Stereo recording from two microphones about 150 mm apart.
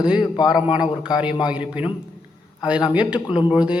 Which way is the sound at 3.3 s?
30° left (ahead or behind).